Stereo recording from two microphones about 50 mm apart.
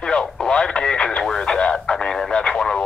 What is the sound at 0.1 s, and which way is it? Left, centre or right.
Radio, centre.